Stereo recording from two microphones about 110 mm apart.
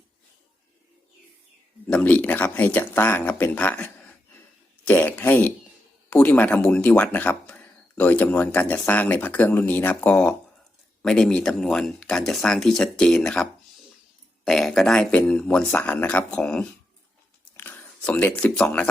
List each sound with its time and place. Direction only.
1.9 s speech: 15° left (ahead or behind)
17.6 s a sound: 15° left (ahead or behind)
18.5 s speech: 10° left (ahead or behind)